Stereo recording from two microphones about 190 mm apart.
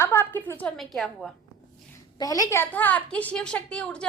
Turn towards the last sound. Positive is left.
turn(degrees=5)  # may be behind; listen again after turning